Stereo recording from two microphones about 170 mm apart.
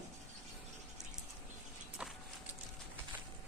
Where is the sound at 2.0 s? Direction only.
5° right (ahead or behind).